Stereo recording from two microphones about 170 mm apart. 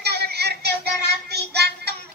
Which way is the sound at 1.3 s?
75° right (ahead or behind).